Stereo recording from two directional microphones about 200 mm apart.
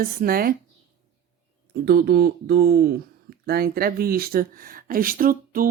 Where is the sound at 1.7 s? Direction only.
50° right (ahead or behind).